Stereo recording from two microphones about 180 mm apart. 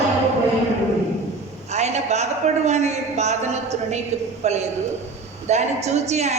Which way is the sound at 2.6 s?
40° right (ahead or behind).